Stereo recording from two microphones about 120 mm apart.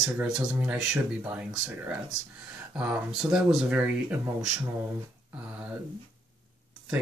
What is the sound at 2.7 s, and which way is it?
Speech, 10° right (ahead or behind).